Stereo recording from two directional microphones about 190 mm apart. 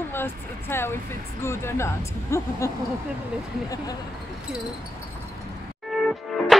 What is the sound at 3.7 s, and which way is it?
Speech, 20° left (ahead or behind).